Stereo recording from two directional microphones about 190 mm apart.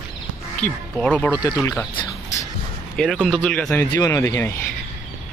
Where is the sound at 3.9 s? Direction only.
20° left (ahead or behind).